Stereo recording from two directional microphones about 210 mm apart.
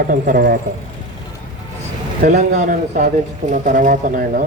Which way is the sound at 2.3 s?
35° right (ahead or behind).